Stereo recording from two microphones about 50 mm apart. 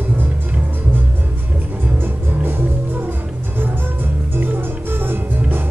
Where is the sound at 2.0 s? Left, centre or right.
Right.